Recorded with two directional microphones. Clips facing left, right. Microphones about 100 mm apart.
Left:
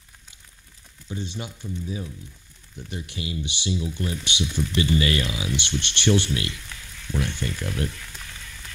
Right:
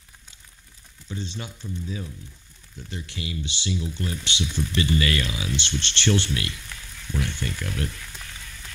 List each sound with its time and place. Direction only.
1.1 s frying: 15° left (ahead or behind)
2.7 s speech: 20° left (ahead or behind)